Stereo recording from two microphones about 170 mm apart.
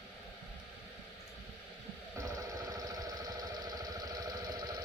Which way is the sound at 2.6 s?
20° right (ahead or behind).